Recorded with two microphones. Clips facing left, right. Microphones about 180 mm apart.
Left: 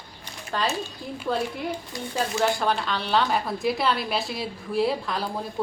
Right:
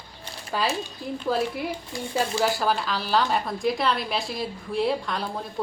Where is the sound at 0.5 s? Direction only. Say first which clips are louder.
Even; 5° right (ahead or behind).